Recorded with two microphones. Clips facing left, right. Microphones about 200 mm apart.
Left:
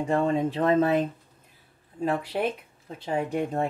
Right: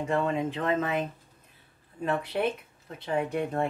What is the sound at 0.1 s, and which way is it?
Speech, 35° left (ahead or behind).